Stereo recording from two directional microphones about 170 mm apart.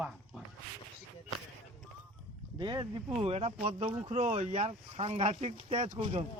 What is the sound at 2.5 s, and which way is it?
Speech, 25° right (ahead or behind).